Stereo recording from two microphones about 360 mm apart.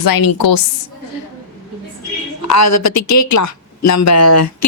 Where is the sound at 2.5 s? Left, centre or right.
Left.